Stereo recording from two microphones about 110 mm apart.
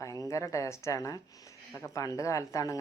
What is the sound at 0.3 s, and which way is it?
Speech, 30° left (ahead or behind).